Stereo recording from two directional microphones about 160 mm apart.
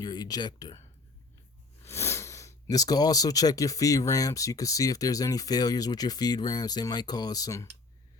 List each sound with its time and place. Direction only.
0.0 s speech: 25° left (ahead or behind)